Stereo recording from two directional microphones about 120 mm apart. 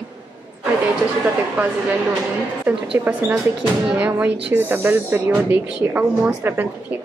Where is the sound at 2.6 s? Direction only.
10° right (ahead or behind).